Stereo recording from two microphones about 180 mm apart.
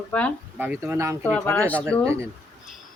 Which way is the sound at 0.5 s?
10° right (ahead or behind).